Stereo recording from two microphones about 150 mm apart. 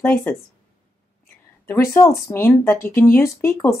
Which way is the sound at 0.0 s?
15° left (ahead or behind).